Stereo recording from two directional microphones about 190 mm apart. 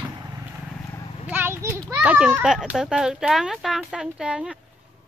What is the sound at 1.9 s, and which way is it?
Speech, 5° right (ahead or behind).